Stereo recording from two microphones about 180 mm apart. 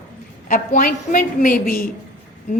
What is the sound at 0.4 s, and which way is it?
A woman's voice, 45° left (ahead or behind).